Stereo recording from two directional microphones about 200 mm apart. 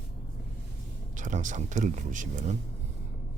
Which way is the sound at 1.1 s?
40° right (ahead or behind).